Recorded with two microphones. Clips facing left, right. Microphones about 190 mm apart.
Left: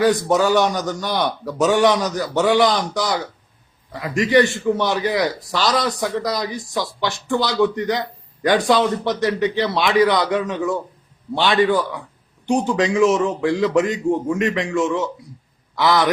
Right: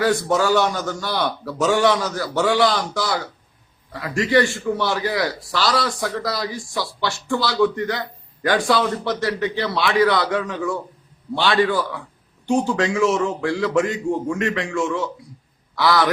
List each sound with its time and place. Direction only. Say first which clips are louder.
0.0 s a man's voice: left 3 dB; 15° left (ahead or behind)